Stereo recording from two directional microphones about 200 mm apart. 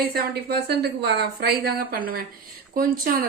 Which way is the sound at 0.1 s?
50° right (ahead or behind).